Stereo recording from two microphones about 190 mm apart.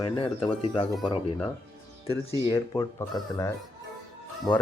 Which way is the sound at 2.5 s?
20° left (ahead or behind).